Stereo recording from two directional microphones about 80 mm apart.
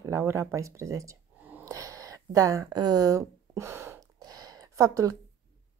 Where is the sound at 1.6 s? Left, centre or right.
Right.